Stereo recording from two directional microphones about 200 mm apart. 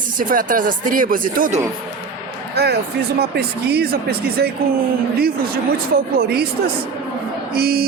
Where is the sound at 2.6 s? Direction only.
55° right (ahead or behind).